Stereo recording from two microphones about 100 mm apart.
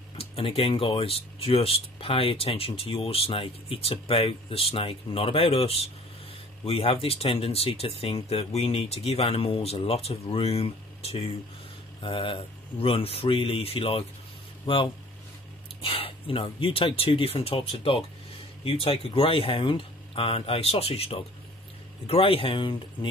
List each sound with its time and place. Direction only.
0.1 s speech: 70° left (ahead or behind); by 11.3 s 90° left
12.0 s speech: 60° left (ahead or behind)
14.7 s speech: 60° left (ahead or behind)